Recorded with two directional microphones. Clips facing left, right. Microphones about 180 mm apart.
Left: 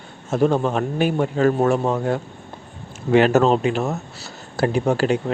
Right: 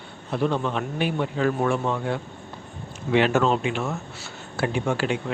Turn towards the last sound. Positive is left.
turn(degrees=40)  # may be behind; listen again after turning